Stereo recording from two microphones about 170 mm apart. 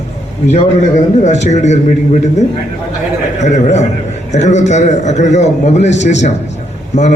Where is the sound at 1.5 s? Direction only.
45° left (ahead or behind).